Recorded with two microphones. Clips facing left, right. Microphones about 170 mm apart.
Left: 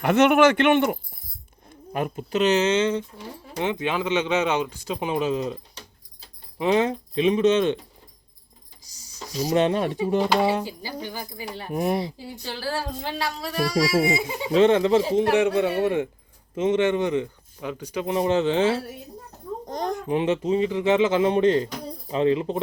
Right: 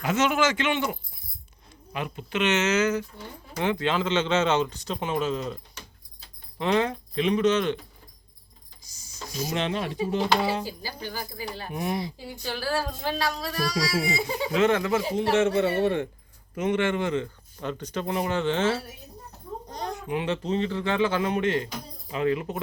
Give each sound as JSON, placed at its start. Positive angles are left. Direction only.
{"t": 0.0, "sound": "a man's voice", "side_deg": 60}
{"t": 6.6, "sound": "speech", "side_deg": 20}
{"t": 9.3, "sound": "speech", "side_deg": 35}
{"t": 10.7, "sound": "speech", "side_deg": 20}
{"t": 11.7, "sound": "speech", "side_deg": 45}
{"t": 11.9, "sound": "speech", "side_deg": 30}
{"t": 15.3, "sound": "speech", "side_deg": 15}
{"t": 19.6, "sound": "babbling", "side_deg": 45}
{"t": 20.1, "sound": "speech", "side_deg": 25}
{"t": 20.4, "sound": "speech", "side_deg": 10}